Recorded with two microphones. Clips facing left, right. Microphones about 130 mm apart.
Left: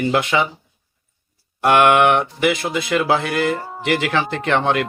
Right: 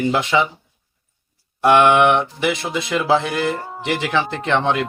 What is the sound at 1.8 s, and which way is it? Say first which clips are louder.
Speech: even; 20° right (ahead or behind).